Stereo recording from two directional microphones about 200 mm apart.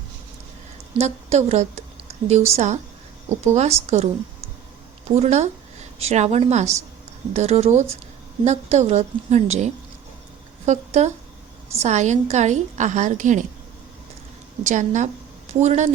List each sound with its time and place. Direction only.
0.9 s a woman's voice: 35° right (ahead or behind)
14.6 s a woman's voice: 35° right (ahead or behind)